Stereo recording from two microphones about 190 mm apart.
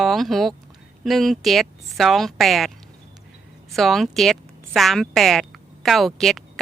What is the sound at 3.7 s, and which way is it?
A woman's voice, centre (ahead or behind).